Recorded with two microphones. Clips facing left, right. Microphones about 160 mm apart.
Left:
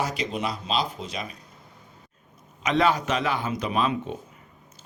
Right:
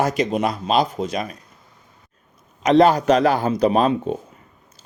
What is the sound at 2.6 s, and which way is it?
Speech, 40° right (ahead or behind).